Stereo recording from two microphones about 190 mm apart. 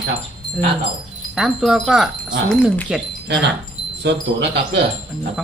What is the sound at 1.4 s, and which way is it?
Wind chime, centre (ahead or behind).